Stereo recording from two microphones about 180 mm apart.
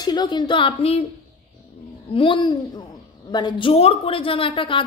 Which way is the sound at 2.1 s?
25° left (ahead or behind).